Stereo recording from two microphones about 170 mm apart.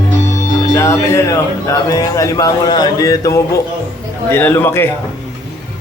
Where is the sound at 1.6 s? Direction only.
20° left (ahead or behind).